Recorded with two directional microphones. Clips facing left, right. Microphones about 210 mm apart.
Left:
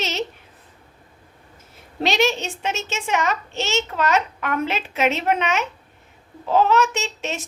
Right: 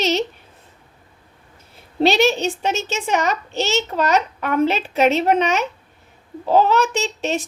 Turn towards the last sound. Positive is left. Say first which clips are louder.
# right 5 dB
turn(degrees=-35)  # may be behind; listen again after turning